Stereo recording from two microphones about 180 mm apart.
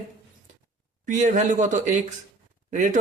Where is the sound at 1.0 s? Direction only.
45° right (ahead or behind).